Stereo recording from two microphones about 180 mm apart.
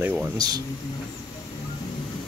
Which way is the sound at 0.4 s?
20° right (ahead or behind).